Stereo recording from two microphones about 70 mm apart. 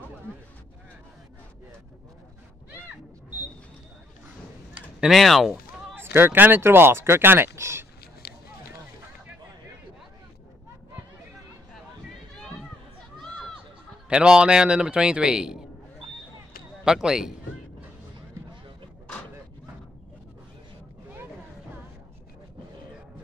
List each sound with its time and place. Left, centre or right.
5.1 s speech: centre
5.9 s speech: right
14.0 s a man's voice: centre
16.8 s a man's voice: centre